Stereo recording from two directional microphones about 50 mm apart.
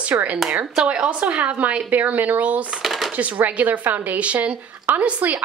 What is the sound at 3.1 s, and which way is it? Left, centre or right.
Speech, right.